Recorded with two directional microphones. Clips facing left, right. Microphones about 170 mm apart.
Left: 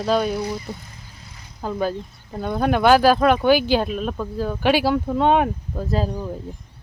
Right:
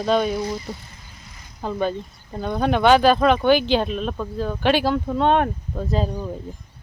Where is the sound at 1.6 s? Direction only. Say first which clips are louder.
Even; 5° left (ahead or behind).